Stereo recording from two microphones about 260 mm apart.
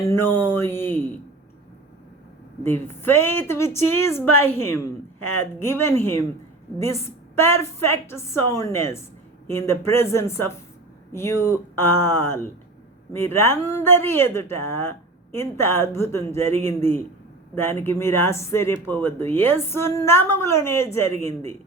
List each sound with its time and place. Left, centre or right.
0.1 s speech: centre
2.6 s speech: centre